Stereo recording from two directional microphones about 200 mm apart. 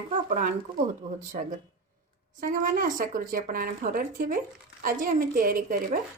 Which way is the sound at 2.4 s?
45° right (ahead or behind).